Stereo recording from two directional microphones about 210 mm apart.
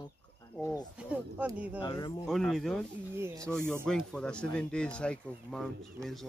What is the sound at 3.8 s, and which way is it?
Speech, 5° left (ahead or behind).